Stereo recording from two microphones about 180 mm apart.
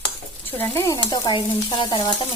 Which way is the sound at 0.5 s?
15° left (ahead or behind).